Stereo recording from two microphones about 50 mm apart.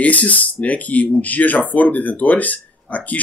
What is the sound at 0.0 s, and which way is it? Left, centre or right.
Speech, left.